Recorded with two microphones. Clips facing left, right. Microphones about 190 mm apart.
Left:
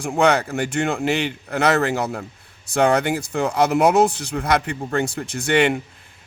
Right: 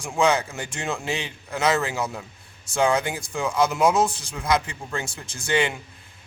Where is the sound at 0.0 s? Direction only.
65° left (ahead or behind).